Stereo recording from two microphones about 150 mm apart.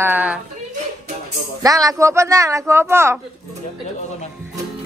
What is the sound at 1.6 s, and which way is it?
Speech, 25° right (ahead or behind).